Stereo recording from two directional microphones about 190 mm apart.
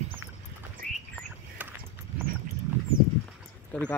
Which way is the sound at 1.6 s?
10° right (ahead or behind).